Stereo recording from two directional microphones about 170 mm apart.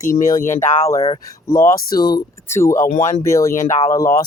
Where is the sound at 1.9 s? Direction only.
65° left (ahead or behind).